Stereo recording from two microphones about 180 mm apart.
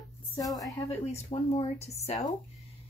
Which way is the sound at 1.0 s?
35° left (ahead or behind).